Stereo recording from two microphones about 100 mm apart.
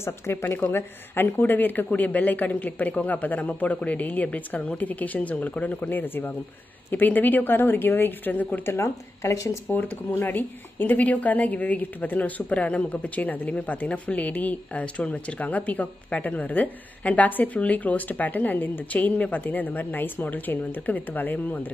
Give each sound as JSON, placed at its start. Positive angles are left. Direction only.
{"t": 0.0, "sound": "a woman's voice", "side_deg": 25}
{"t": 8.7, "sound": "a woman's voice", "side_deg": 30}
{"t": 9.7, "sound": "speech", "side_deg": 20}